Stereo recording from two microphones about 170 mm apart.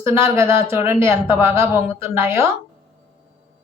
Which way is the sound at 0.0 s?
15° right (ahead or behind).